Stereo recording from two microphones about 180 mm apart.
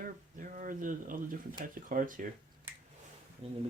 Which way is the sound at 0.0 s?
50° right (ahead or behind).